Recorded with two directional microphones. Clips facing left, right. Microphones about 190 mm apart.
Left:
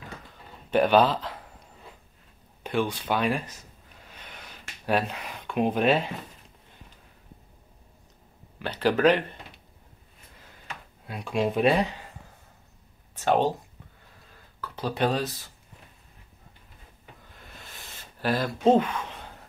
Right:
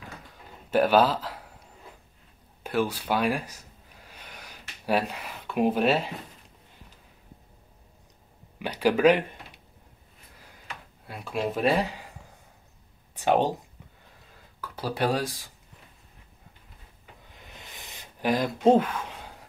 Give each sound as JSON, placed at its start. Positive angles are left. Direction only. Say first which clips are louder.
{"t": 0.7, "sound": "speech", "louder": "even", "side_deg": -5}
{"t": 2.6, "sound": "a sound", "louder": "even", "side_deg": -5}
{"t": 8.5, "sound": "speech", "louder": "right 1 dB", "side_deg": -10}
{"t": 11.1, "sound": "speech", "louder": "left 3 dB", "side_deg": 0}
{"t": 13.1, "sound": "speech", "louder": "even", "side_deg": -15}
{"t": 14.6, "sound": "speech", "louder": "left 1 dB", "side_deg": -10}
{"t": 17.3, "sound": "a sound", "louder": "right 1 dB", "side_deg": -20}